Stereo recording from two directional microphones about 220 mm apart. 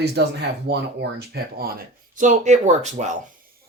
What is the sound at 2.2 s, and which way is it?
Speech, 35° right (ahead or behind).